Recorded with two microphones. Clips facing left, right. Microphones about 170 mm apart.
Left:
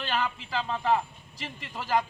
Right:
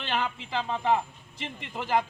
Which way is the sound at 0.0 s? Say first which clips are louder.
Even; 20° right (ahead or behind).